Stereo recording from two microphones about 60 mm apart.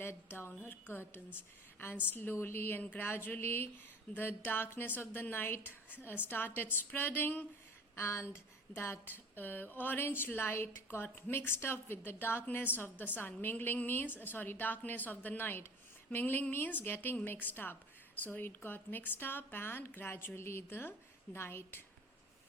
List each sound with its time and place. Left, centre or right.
0.0 s speech: left
7.9 s speech: left